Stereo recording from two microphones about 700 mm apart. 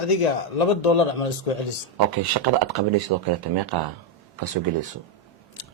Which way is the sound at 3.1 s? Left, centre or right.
Right.